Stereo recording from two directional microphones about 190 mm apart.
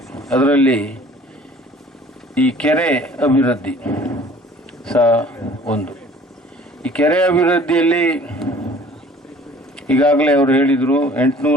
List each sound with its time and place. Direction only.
0.1 s speech: 5° left (ahead or behind)
2.3 s speech: 5° left (ahead or behind)
9.8 s speech: 5° left (ahead or behind)